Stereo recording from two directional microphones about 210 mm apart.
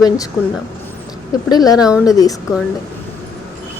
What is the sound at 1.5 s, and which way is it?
Speech, 20° left (ahead or behind).